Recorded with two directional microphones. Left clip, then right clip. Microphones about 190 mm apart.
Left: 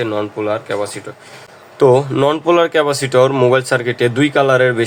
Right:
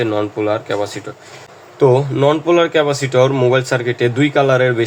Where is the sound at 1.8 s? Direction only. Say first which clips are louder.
Left 1 dB; 20° left (ahead or behind).